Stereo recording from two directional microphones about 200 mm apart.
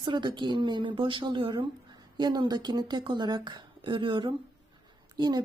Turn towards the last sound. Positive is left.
turn(degrees=-20)  # may be behind; listen again after turning